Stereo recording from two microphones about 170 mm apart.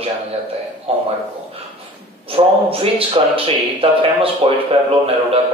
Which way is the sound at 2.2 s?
35° right (ahead or behind).